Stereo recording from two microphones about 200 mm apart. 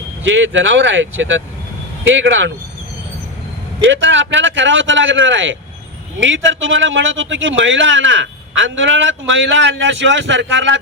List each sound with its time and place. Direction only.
0.3 s a man's voice: 70° right (ahead or behind)
3.8 s a man's voice: 65° right (ahead or behind)